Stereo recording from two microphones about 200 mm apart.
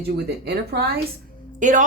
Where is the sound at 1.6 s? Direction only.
40° right (ahead or behind).